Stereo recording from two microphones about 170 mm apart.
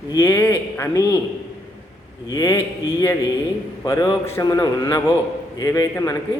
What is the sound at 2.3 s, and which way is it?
Speech, 20° left (ahead or behind).